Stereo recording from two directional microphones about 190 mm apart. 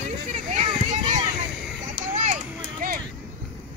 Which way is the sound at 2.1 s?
40° right (ahead or behind).